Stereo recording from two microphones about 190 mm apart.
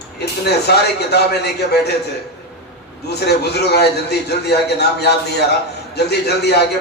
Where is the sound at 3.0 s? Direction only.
60° left (ahead or behind).